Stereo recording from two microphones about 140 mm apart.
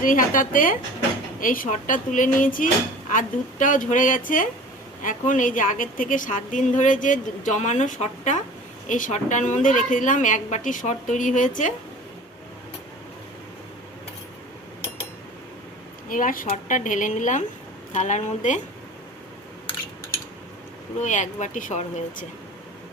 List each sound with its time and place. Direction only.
0.0 s a woman's voice: 75° left (ahead or behind)
16.0 s a woman's voice: 75° left (ahead or behind); by 18.6 s 60° left (ahead or behind)
21.0 s a woman's voice: 60° left (ahead or behind)